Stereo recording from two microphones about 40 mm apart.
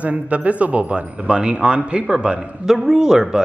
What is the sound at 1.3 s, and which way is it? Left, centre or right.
Speech, right.